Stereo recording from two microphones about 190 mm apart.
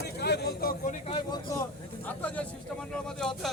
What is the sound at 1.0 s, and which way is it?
Speech, 25° left (ahead or behind).